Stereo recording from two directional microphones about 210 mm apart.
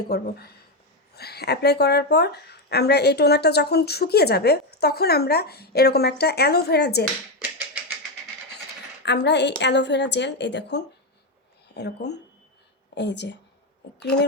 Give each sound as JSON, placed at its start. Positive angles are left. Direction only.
{"t": 0.1, "sound": "speech", "side_deg": 50}
{"t": 9.0, "sound": "a woman's voice", "side_deg": 55}